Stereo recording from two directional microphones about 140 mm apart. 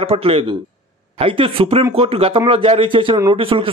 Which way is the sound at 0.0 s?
45° right (ahead or behind).